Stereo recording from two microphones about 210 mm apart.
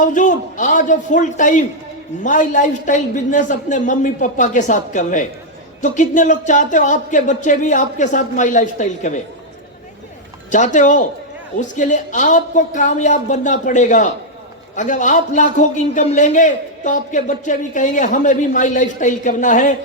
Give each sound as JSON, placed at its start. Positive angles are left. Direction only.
{"t": 0.0, "sound": "a man's voice", "side_deg": 35}
{"t": 10.5, "sound": "a man's voice", "side_deg": 35}